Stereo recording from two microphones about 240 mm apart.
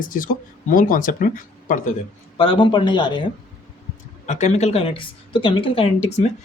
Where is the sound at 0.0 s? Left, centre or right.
Left.